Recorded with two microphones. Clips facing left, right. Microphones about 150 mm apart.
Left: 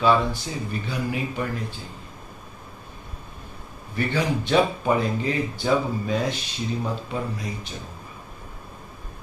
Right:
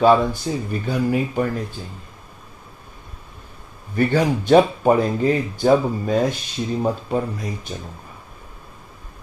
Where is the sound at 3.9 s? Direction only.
45° right (ahead or behind).